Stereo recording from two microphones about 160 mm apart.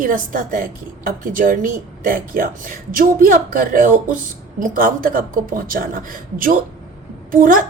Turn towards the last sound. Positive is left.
turn(degrees=-60)  # may be behind; listen again after turning